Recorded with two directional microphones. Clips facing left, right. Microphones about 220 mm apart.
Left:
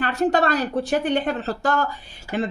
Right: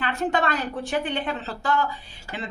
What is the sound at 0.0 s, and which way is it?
A woman's voice, 40° left (ahead or behind).